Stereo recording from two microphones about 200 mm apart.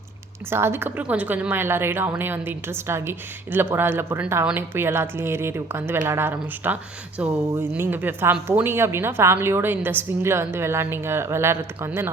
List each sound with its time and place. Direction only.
0.5 s a woman's voice: 10° right (ahead or behind)